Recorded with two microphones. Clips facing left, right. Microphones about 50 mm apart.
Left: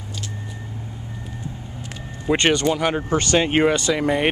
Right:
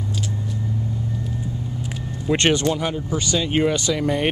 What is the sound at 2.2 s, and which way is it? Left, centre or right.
Speech, centre.